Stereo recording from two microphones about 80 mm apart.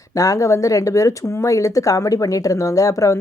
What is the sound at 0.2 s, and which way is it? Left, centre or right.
A woman's voice, left.